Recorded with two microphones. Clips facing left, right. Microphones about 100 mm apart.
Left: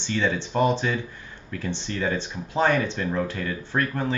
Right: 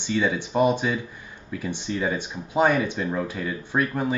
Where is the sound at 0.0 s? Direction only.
10° right (ahead or behind).